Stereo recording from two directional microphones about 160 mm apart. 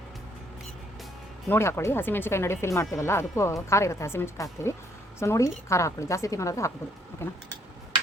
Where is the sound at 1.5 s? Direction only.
15° left (ahead or behind).